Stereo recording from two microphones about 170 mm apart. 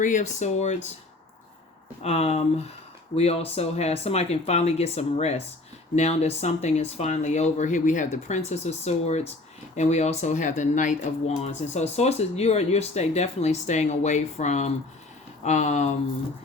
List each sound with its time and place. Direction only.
0.0 s speech: 45° left (ahead or behind)
2.0 s speech: 40° left (ahead or behind)